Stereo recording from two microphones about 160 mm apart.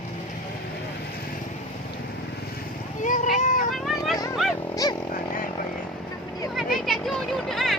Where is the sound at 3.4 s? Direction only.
50° left (ahead or behind).